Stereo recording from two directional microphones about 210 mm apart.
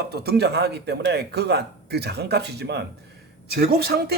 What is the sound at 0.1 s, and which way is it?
A man's voice, 50° right (ahead or behind).